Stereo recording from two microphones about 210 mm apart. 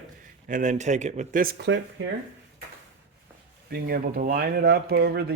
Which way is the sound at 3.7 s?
45° right (ahead or behind).